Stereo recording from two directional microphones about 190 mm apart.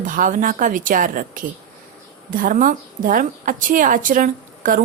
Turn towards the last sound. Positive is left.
turn(degrees=-45)  # may be behind; listen again after turning